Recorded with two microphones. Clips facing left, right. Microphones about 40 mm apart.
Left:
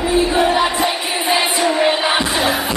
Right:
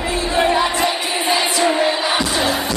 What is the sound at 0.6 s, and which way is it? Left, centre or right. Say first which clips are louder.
Music: left 1 dB; centre.